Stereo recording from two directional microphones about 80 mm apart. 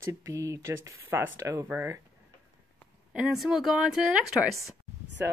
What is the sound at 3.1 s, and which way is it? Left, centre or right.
Speech, centre.